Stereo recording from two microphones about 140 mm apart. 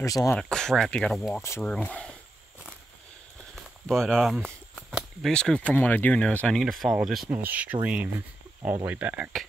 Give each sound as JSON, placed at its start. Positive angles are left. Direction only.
{"t": 0.0, "sound": "speech", "side_deg": 25}
{"t": 0.4, "sound": "speech", "side_deg": 5}
{"t": 3.8, "sound": "a sound", "side_deg": 5}
{"t": 5.3, "sound": "speech", "side_deg": 5}